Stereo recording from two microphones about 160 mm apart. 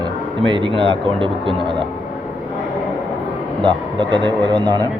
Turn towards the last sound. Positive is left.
turn(degrees=-30)  # may be behind; listen again after turning